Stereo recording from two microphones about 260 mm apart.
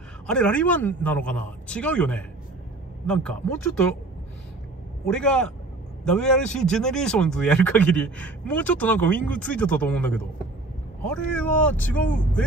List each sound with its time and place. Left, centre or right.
0.3 s a man's voice: centre
5.0 s a man's voice: centre